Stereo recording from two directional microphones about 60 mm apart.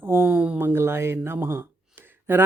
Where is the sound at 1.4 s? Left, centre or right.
Right.